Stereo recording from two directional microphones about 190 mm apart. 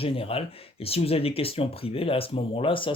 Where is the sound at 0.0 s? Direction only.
30° left (ahead or behind).